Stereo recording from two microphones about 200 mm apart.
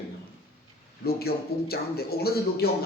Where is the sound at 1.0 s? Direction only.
50° left (ahead or behind).